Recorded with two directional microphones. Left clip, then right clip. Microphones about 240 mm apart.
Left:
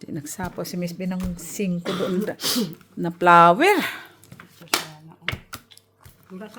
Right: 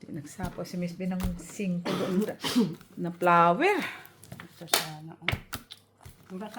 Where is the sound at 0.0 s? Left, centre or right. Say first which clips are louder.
Left 7 dB; left.